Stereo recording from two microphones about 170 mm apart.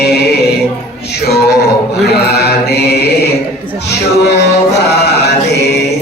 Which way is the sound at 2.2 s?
70° left (ahead or behind).